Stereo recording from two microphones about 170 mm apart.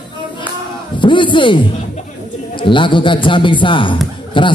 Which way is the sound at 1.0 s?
30° left (ahead or behind).